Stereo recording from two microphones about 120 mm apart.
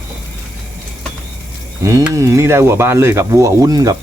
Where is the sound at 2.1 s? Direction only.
25° right (ahead or behind).